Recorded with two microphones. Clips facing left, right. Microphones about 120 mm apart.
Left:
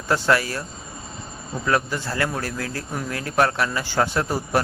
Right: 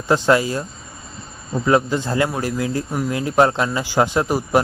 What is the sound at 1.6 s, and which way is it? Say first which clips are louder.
A man's voice: right 6 dB; 20° right (ahead or behind).